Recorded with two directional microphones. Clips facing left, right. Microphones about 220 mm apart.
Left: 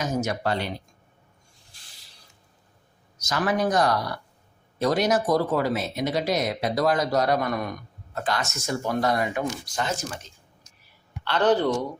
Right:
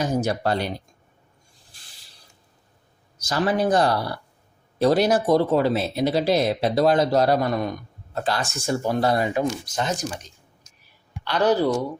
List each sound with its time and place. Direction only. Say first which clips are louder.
0.0 s speech: right 3 dB; 30° right (ahead or behind)
3.2 s speech: right 2 dB; 30° right (ahead or behind); by 11.8 s 10° right (ahead or behind)